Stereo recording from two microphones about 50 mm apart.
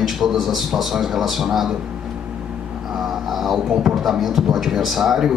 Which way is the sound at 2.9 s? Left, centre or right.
Centre.